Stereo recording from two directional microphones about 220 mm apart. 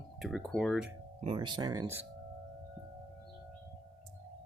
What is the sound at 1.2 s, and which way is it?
Speech, 25° right (ahead or behind).